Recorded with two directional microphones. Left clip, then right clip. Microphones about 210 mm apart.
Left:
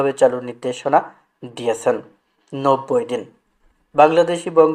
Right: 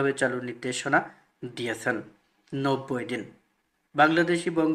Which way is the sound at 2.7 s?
Centre (ahead or behind).